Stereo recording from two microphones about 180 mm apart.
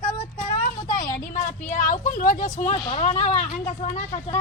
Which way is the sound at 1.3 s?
40° left (ahead or behind).